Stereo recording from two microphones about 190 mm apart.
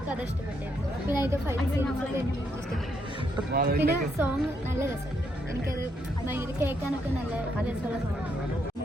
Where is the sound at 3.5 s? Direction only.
50° right (ahead or behind).